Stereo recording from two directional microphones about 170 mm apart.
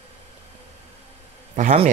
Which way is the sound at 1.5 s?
50° right (ahead or behind).